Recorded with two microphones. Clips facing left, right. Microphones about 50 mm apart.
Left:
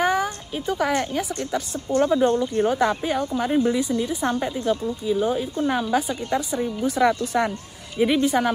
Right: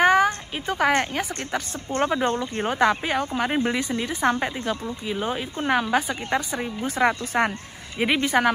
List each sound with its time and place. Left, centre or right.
0.0 s a woman's voice: right